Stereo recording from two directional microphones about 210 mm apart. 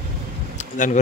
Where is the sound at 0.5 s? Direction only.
35° left (ahead or behind).